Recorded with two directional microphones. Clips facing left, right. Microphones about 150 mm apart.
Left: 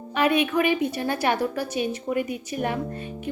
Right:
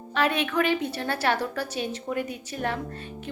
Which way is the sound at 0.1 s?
10° left (ahead or behind).